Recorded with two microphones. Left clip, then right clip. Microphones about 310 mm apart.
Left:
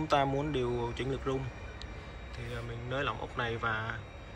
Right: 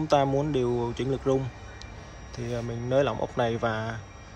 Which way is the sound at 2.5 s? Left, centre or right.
Centre.